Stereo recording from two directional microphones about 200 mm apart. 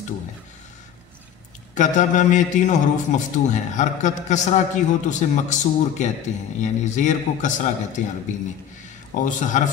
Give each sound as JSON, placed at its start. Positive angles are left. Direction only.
{"t": 1.8, "sound": "a man's voice", "side_deg": 40}